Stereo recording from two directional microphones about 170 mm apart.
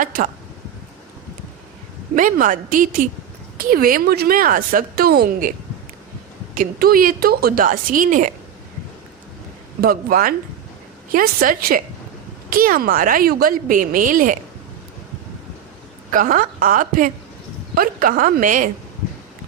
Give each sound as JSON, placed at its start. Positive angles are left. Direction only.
{"t": 0.0, "sound": "a woman's voice", "side_deg": -50}
{"t": 2.1, "sound": "a woman's voice", "side_deg": -50}
{"t": 9.8, "sound": "a woman's voice", "side_deg": -60}
{"t": 16.1, "sound": "a woman's voice", "side_deg": -55}